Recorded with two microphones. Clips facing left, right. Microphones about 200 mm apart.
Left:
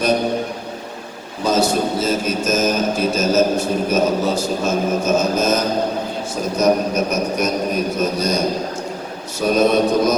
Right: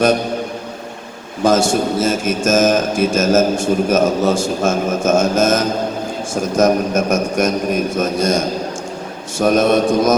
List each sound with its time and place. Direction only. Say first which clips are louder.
1.5 s a man's voice: right 3 dB; 50° right (ahead or behind)
9.4 s a man's voice: right 2 dB; 50° right (ahead or behind)